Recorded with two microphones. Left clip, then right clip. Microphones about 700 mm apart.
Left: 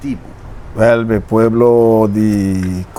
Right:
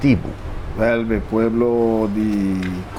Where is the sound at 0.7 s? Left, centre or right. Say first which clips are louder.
Left 7 dB; left.